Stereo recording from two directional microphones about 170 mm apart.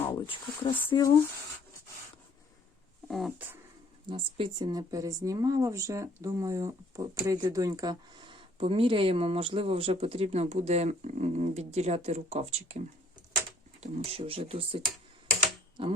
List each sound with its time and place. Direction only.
0.2 s speech: 30° left (ahead or behind)
3.1 s speech: centre (ahead or behind)
4.1 s speech: 30° right (ahead or behind)
15.8 s speech: 30° right (ahead or behind)